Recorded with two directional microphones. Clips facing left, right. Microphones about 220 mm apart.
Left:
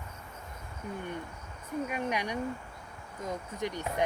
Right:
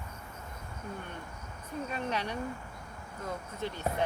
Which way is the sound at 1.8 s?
15° left (ahead or behind).